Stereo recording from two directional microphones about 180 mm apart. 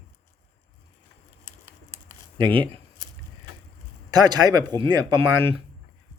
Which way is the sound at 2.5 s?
10° left (ahead or behind).